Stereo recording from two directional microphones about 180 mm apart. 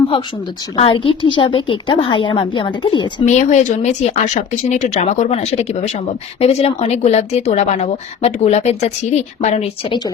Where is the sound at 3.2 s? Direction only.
40° left (ahead or behind).